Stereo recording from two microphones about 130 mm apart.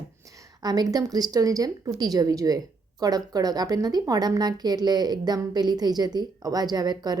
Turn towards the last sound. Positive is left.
turn(degrees=-30)  # may be behind; listen again after turning